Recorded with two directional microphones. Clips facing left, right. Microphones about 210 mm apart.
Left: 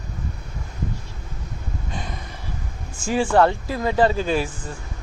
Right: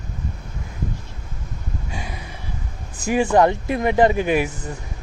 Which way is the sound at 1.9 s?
10° right (ahead or behind).